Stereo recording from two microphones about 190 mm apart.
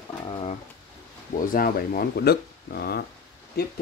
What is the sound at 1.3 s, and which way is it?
Speech, 50° left (ahead or behind).